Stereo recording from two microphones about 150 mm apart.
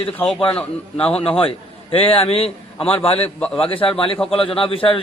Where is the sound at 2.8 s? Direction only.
10° left (ahead or behind).